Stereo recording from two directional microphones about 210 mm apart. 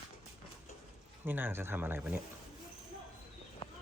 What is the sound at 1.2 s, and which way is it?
Speech, 10° right (ahead or behind).